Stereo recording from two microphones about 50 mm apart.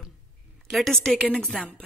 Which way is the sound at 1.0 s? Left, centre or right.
Centre.